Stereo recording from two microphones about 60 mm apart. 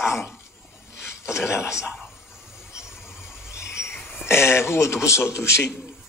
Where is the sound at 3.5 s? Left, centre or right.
Left.